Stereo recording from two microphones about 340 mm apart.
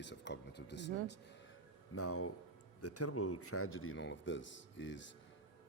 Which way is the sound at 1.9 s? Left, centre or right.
Left.